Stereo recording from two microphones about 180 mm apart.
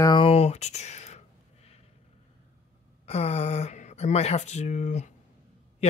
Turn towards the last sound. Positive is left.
turn(degrees=40)  # may be behind; listen again after turning